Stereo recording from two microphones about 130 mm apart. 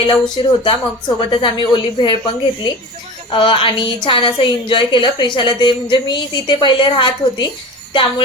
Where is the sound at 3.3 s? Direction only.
40° left (ahead or behind).